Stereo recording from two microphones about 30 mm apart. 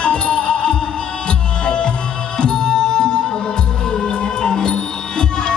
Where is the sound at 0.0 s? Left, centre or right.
Left.